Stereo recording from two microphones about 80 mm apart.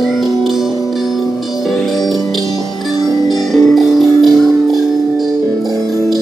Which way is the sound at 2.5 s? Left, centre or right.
Left.